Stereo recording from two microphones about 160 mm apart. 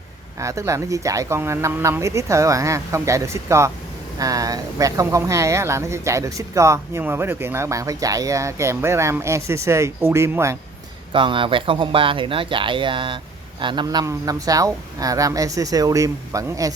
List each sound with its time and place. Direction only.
0.3 s speech: 20° right (ahead or behind)
11.1 s speech: 30° right (ahead or behind)